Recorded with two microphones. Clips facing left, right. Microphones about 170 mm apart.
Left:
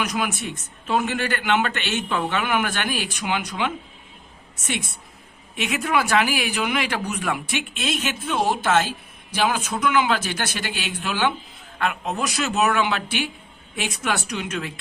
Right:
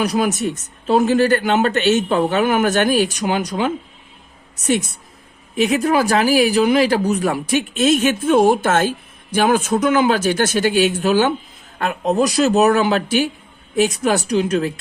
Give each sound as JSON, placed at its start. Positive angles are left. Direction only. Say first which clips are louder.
{"t": 0.0, "sound": "a man's voice", "louder": "right 8 dB", "side_deg": -35}